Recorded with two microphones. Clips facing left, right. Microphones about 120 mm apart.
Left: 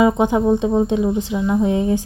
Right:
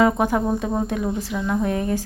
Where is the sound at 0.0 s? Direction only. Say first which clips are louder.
Left 3 dB; 20° left (ahead or behind).